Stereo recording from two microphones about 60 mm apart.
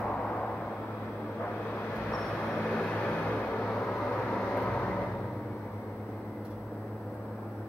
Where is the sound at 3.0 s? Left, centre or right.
Left.